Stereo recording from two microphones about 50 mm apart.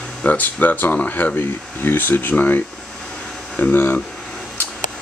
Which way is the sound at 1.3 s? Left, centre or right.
Left.